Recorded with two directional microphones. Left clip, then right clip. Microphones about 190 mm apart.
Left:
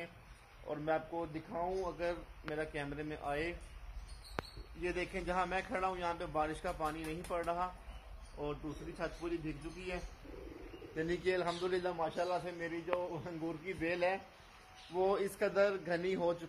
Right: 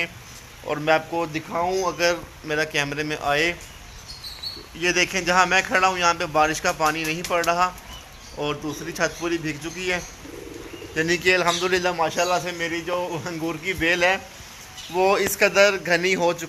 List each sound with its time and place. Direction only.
0.7 s a man's voice: 5° left (ahead or behind)
4.8 s a man's voice: centre (ahead or behind)
8.4 s speech: 15° right (ahead or behind)
11.0 s a man's voice: 5° left (ahead or behind)